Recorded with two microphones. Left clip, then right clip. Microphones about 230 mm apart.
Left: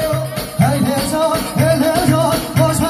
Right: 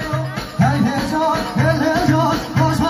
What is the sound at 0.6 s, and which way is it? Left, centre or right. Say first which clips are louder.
Music: left 2 dB; left.